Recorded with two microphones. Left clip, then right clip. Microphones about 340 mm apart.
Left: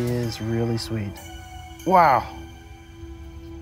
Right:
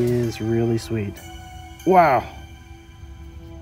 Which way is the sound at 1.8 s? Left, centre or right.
Centre.